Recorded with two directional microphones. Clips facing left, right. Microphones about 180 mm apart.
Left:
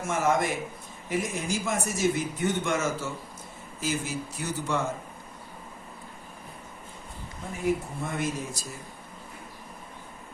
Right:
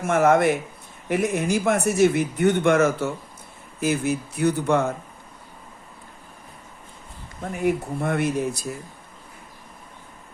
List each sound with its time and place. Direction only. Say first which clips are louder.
0.0 s speech: right 8 dB; 60° right (ahead or behind)
7.6 s speech: right 5 dB; 65° right (ahead or behind)